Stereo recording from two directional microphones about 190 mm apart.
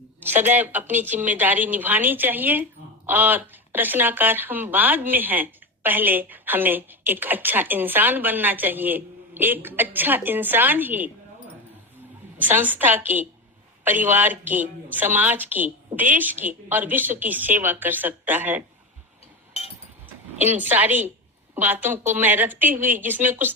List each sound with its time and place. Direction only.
0.2 s speech: 10° right (ahead or behind)
12.4 s speech: 10° right (ahead or behind)
19.6 s a sound: 35° left (ahead or behind)
20.4 s a woman's voice: 10° right (ahead or behind)